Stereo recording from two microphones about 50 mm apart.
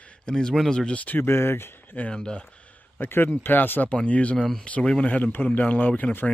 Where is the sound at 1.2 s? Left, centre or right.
Left.